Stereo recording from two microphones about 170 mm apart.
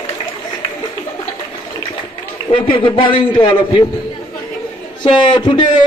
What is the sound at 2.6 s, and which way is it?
A man's voice, 30° left (ahead or behind).